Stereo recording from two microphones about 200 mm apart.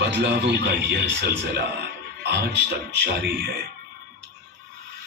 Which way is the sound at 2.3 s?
60° right (ahead or behind).